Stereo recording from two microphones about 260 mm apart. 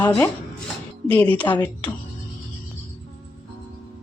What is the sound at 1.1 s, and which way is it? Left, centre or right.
Speech, centre.